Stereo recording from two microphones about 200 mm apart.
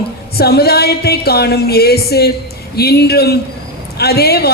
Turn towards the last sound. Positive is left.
turn(degrees=55)  # may be behind; listen again after turning